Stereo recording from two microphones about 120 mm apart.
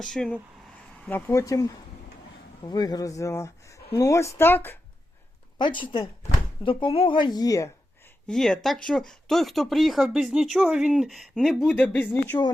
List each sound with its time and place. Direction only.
0.1 s speech: 5° left (ahead or behind)
1.3 s speech: 30° left (ahead or behind)
5.5 s speech: 40° left (ahead or behind)
8.3 s speech: 5° left (ahead or behind)